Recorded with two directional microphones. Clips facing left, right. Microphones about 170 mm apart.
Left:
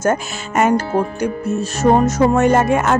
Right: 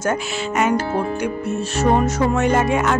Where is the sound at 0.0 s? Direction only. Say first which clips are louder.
Left 3 dB; 45° left (ahead or behind).